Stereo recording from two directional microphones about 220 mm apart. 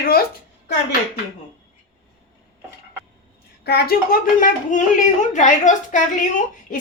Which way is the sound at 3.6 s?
45° left (ahead or behind).